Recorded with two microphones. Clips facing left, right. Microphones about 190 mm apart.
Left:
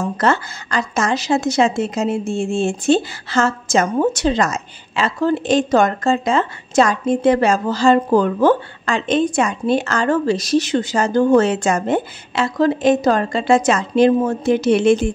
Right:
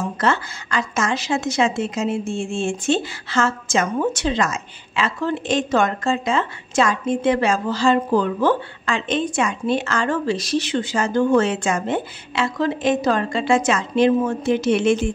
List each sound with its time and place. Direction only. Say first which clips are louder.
0.2 s a woman's voice: left 3 dB; 40° left (ahead or behind)